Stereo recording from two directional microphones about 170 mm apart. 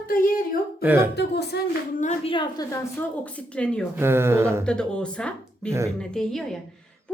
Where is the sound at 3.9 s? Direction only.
15° right (ahead or behind).